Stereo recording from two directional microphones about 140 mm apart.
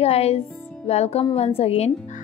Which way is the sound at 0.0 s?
45° left (ahead or behind).